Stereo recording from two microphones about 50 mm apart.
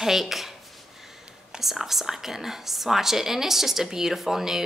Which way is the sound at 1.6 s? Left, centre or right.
Centre.